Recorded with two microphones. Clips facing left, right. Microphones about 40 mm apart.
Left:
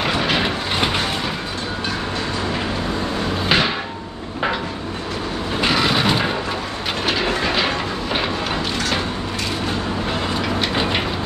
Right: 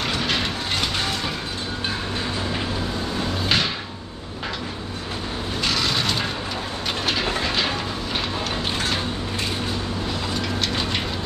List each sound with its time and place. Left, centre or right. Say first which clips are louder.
0.0 s vehicle: left 5 dB; centre
3.4 s a sound: left 5 dB; centre
5.6 s vehicle: left 6 dB; left
7.1 s train: left 4 dB; centre
10.4 s vehicle: left 5 dB; centre